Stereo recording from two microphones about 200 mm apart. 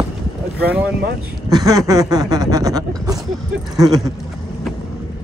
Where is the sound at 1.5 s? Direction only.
20° right (ahead or behind).